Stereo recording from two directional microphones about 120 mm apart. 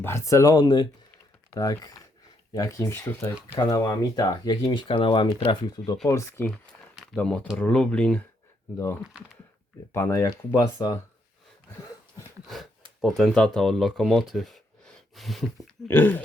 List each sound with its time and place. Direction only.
0.0 s speech: 20° left (ahead or behind)
3.6 s speech: 30° left (ahead or behind)
6.1 s speech: 20° left (ahead or behind)
6.9 s a sound: centre (ahead or behind)
7.2 s speech: 10° left (ahead or behind)
9.9 s speech: 25° left (ahead or behind)
13.0 s speech: centre (ahead or behind)
15.9 s speech: 15° left (ahead or behind)